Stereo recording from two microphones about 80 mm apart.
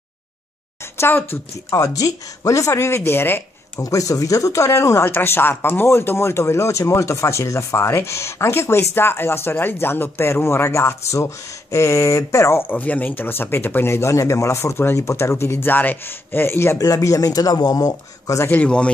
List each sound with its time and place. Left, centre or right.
0.9 s speech: left
1.7 s speech: left
3.0 s speech: left
3.8 s speech: left
16.7 s speech: left
18.5 s a man's voice: centre